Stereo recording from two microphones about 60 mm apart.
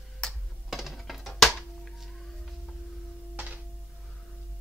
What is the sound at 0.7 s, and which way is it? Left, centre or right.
Music, centre.